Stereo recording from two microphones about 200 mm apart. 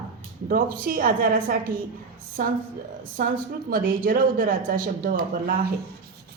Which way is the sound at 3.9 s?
45° right (ahead or behind).